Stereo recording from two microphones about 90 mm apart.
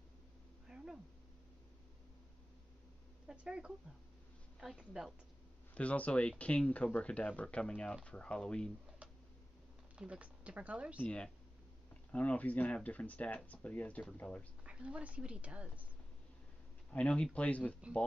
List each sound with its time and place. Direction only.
0.7 s a sound: 5° right (ahead or behind)
3.3 s a woman's voice: 10° right (ahead or behind)
5.8 s speech: 15° left (ahead or behind)
9.9 s speech: 15° right (ahead or behind)
11.0 s speech: 10° left (ahead or behind)
14.6 s speech: 10° right (ahead or behind)
16.9 s speech: 10° left (ahead or behind)